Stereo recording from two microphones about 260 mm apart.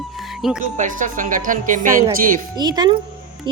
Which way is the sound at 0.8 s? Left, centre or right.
Right.